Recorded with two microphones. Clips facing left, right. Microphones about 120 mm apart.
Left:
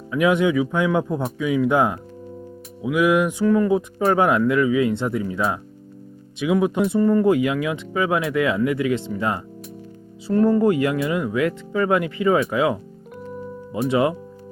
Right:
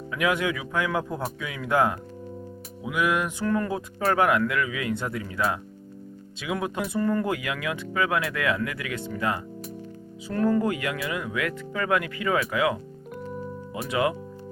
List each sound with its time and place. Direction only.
0.1 s speech: 25° left (ahead or behind)
2.9 s speech: 10° left (ahead or behind); by 14.2 s 25° left (ahead or behind)